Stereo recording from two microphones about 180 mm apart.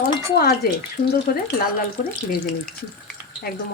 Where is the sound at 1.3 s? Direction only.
50° left (ahead or behind).